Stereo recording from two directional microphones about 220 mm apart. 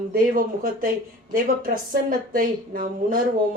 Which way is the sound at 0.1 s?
40° right (ahead or behind).